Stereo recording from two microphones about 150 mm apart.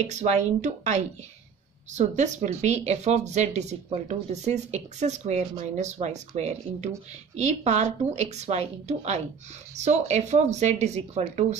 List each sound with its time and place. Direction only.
0.0 s speech: 45° right (ahead or behind)